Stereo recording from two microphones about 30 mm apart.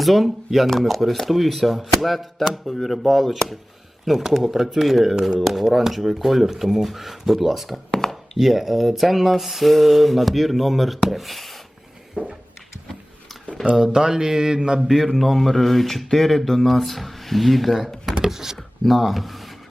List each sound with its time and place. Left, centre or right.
0.0 s speech: centre
2.9 s speech: centre
7.9 s chopping: centre
8.4 s speech: centre
12.2 s a sound: right
13.7 s mantra: right
14.9 s speech: centre
18.3 s speech: centre
18.5 s speech: centre